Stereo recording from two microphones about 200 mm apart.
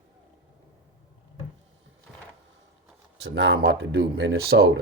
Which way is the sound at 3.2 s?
65° right (ahead or behind).